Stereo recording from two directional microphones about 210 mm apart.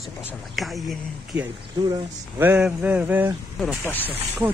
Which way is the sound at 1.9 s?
10° right (ahead or behind).